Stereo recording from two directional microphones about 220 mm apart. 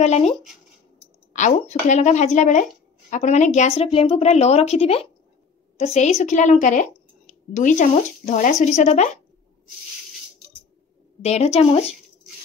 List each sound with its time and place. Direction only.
0.0 s a woman's voice: 30° left (ahead or behind)
11.2 s a woman's voice: 30° left (ahead or behind)